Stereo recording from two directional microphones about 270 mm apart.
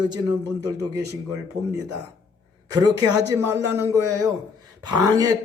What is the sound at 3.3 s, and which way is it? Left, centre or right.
A man's voice, centre.